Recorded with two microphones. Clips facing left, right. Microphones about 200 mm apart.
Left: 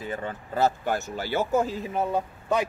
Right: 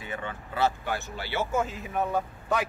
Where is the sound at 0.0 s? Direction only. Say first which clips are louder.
Left 4 dB; 35° left (ahead or behind).